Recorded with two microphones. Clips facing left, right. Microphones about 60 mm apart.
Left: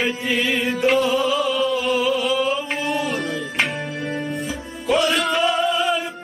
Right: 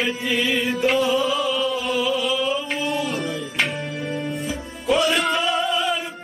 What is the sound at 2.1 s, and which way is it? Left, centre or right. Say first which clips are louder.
Music: left 2 dB; left.